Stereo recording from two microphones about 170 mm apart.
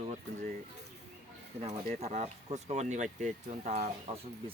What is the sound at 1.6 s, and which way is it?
Speech, 40° right (ahead or behind).